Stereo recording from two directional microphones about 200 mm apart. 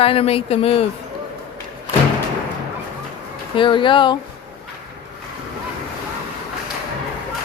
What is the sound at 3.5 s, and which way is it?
Speech, 25° left (ahead or behind).